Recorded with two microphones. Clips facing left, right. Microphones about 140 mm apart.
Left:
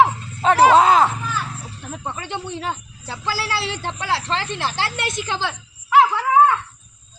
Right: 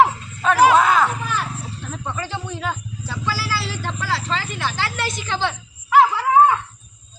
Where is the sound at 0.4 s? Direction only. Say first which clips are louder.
Left 1 dB; 30° left (ahead or behind).